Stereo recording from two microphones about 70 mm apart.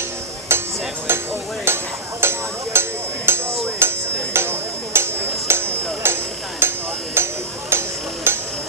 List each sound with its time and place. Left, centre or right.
0.5 s music: right
1.0 s a sound: right
6.6 s hammer: right